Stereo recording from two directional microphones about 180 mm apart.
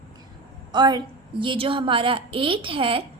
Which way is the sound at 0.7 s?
25° right (ahead or behind).